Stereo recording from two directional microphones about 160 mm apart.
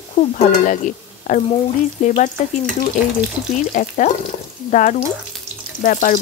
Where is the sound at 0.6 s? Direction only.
55° left (ahead or behind).